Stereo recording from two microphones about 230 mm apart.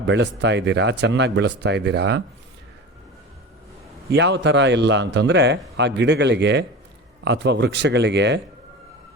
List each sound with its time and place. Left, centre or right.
0.1 s speech: right
4.1 s speech: right